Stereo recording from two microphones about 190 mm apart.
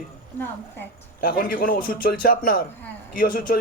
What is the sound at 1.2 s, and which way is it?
Speech, 50° left (ahead or behind).